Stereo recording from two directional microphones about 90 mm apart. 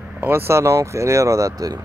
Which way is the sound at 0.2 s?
25° right (ahead or behind).